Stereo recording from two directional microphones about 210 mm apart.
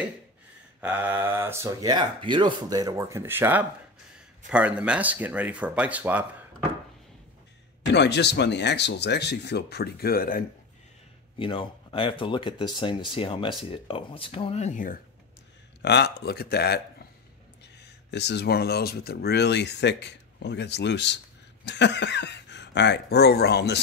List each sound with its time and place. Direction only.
0.7 s speech: 10° right (ahead or behind)
7.9 s speech: 55° left (ahead or behind)
11.3 s speech: 25° left (ahead or behind)
15.8 s speech: 50° left (ahead or behind)
17.8 s speech: 55° left (ahead or behind)